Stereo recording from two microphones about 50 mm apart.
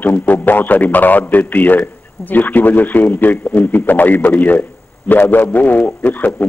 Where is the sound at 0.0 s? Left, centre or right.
Left.